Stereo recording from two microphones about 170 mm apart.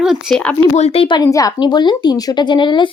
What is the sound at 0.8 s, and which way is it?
Speech, 35° left (ahead or behind).